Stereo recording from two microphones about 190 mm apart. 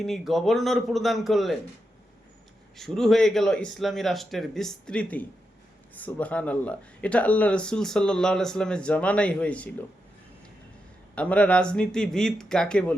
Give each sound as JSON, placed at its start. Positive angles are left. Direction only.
{"t": 0.0, "sound": "speech", "side_deg": 0}
{"t": 2.7, "sound": "speech", "side_deg": 0}
{"t": 11.1, "sound": "speech", "side_deg": 5}